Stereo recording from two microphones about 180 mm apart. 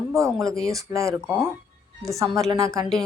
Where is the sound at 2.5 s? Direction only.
20° right (ahead or behind).